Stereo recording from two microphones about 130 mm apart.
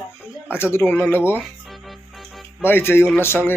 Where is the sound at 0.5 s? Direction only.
20° left (ahead or behind).